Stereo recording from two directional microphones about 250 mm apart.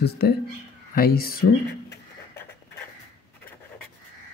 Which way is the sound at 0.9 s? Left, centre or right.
Left.